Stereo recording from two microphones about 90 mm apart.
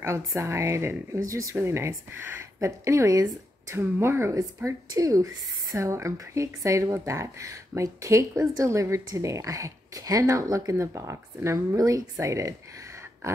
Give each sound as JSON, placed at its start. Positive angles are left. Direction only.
{"t": 0.4, "sound": "speech", "side_deg": -30}
{"t": 3.8, "sound": "speech", "side_deg": -30}